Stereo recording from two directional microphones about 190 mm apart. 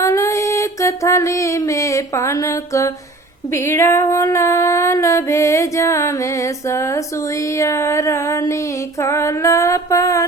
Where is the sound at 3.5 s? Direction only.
15° left (ahead or behind).